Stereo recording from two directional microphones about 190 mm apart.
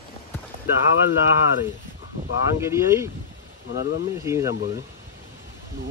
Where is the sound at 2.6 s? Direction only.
15° right (ahead or behind).